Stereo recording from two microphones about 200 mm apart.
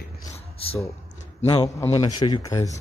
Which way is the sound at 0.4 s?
30° left (ahead or behind).